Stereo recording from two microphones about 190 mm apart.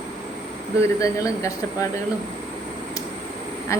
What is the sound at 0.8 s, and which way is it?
Speech, 15° left (ahead or behind).